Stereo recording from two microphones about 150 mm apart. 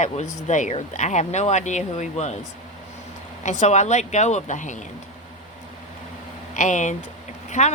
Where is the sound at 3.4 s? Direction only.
50° left (ahead or behind).